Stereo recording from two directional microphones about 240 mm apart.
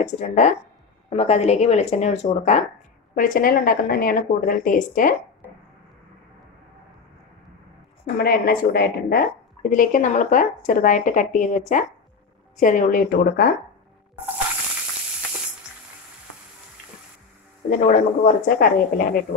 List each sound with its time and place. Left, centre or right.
0.0 s a woman's voice: left
8.2 s a woman's voice: left
12.5 s a woman's voice: left
17.6 s a woman's voice: left